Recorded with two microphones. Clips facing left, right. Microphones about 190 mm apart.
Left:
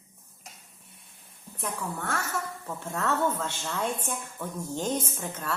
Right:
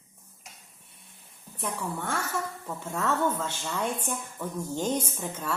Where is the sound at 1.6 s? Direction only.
10° right (ahead or behind).